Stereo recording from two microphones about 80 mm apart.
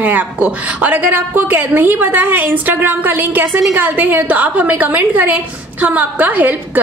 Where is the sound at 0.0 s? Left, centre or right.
Centre.